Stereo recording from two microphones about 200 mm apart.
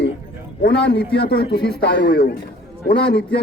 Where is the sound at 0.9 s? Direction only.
55° left (ahead or behind).